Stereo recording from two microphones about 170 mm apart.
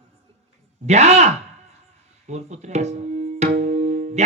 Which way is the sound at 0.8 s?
40° right (ahead or behind).